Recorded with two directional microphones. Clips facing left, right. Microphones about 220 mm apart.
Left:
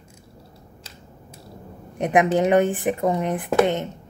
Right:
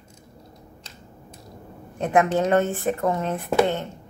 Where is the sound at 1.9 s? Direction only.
15° left (ahead or behind).